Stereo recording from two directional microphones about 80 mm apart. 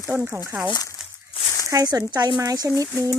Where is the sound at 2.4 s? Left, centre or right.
Right.